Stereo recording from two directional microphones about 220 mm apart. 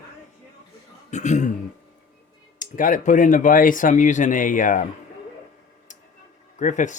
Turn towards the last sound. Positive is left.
turn(degrees=35)  # may be behind; listen again after turning